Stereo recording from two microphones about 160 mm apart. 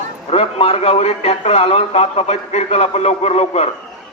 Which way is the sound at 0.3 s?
40° left (ahead or behind).